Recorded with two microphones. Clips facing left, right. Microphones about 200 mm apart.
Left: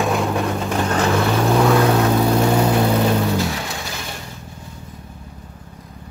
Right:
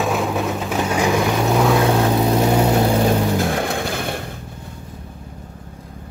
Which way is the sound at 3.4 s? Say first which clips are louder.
Right 4 dB; 50° right (ahead or behind).